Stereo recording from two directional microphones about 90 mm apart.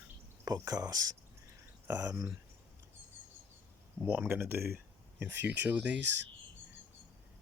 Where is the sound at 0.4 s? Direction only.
40° right (ahead or behind).